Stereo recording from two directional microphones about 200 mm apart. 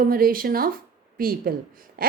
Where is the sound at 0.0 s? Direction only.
45° right (ahead or behind).